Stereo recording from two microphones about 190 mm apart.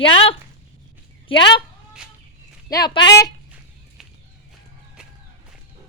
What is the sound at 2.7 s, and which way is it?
Speech, 20° left (ahead or behind).